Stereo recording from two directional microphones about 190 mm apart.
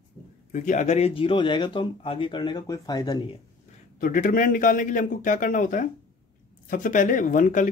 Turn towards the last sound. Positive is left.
turn(degrees=45)  # may be behind; listen again after turning